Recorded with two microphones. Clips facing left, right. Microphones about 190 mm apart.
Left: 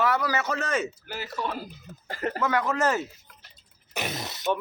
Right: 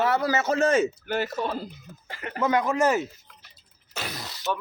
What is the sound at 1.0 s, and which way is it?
Speech, 60° right (ahead or behind).